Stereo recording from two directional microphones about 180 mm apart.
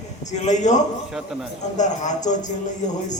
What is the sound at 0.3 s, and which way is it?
A man's voice, 40° left (ahead or behind).